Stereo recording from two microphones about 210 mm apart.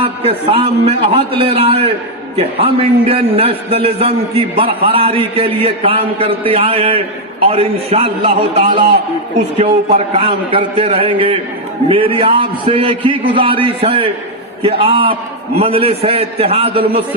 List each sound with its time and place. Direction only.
0.0 s a man's voice: 25° right (ahead or behind)
9.9 s a man's voice: 25° right (ahead or behind)